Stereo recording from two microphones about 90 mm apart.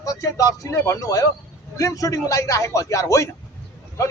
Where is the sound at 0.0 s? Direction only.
35° left (ahead or behind).